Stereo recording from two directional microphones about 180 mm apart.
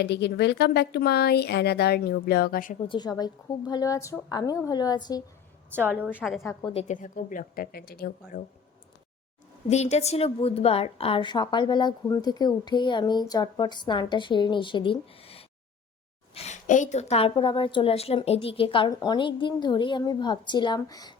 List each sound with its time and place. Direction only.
0.0 s speech: 70° left (ahead or behind); by 2.7 s 55° left (ahead or behind)
2.9 s a woman's voice: 20° left (ahead or behind)
6.1 s a woman's voice: 5° right (ahead or behind)
6.5 s a woman's voice: 20° left (ahead or behind)
6.7 s a woman's voice: 45° left (ahead or behind)
9.6 s a woman's voice: 40° left (ahead or behind); by 21.2 s 20° left (ahead or behind)